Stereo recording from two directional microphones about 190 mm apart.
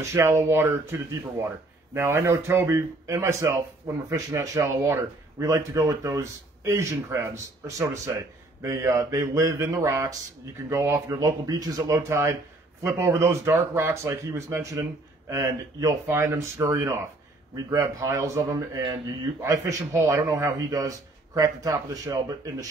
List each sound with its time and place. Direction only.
0.0 s speech: 15° right (ahead or behind)